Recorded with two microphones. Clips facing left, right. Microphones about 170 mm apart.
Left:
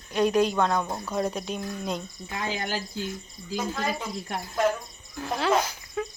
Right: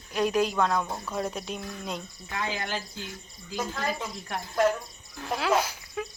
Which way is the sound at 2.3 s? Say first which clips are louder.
Left 1 dB; 25° left (ahead or behind).